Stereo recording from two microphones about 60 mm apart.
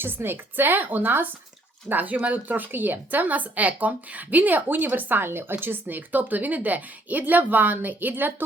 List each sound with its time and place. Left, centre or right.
0.0 s a woman's voice: right